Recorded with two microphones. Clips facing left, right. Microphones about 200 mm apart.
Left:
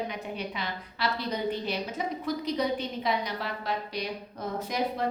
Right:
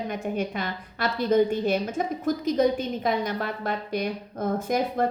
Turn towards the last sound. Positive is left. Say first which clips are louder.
# right 5 dB
turn(degrees=-50)  # may be behind; listen again after turning